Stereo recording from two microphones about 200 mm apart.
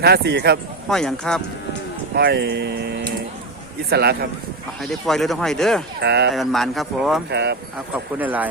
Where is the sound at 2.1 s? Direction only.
55° right (ahead or behind).